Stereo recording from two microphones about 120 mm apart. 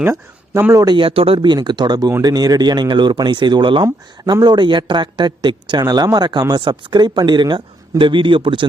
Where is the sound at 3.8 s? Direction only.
30° right (ahead or behind).